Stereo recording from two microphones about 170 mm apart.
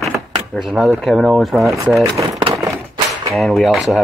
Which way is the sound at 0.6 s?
Centre (ahead or behind).